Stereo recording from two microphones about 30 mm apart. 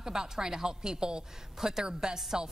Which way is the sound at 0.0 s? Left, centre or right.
Right.